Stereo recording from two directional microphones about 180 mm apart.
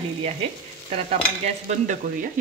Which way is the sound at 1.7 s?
45° right (ahead or behind).